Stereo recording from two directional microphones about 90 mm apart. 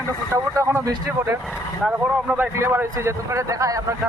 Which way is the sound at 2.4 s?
30° right (ahead or behind).